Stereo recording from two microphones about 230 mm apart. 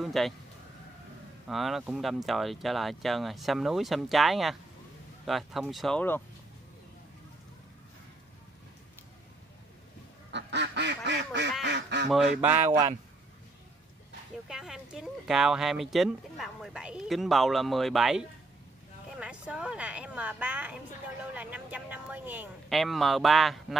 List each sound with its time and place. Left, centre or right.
0.0 s speech: centre
1.5 s speech: centre
10.3 s duck: right
12.6 s a man's voice: centre
14.5 s a woman's voice: centre